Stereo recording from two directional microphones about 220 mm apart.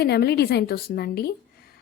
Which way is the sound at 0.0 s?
45° left (ahead or behind).